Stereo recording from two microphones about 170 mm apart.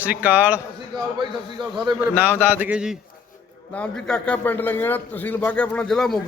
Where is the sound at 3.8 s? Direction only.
5° left (ahead or behind).